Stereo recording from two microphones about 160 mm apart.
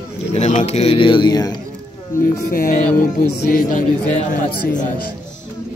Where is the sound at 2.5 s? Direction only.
55° left (ahead or behind).